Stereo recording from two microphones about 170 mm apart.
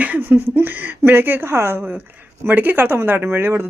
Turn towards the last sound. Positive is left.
turn(degrees=-15)  # may be behind; listen again after turning